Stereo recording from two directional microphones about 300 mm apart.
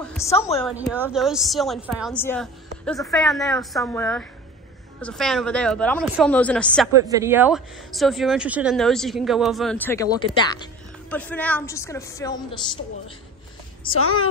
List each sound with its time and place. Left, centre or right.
0.0 s a sound: centre
0.7 s speech: centre
7.1 s speech: centre
13.9 s a woman's voice: left